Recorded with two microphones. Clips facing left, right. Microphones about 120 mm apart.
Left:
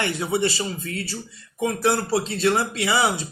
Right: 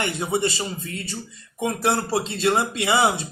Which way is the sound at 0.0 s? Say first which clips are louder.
Left 1 dB; 20° right (ahead or behind).